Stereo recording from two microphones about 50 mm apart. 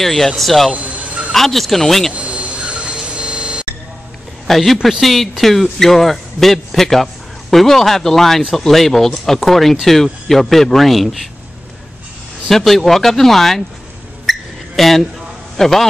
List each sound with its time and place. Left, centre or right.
0.0 s speech: centre
0.7 s a sound: right
1.3 s speech: centre
2.1 s jet engine: right
3.0 s buzzer: right
4.5 s a man's voice: centre
12.4 s speech: centre
14.3 s a sound: centre
14.8 s a man's voice: centre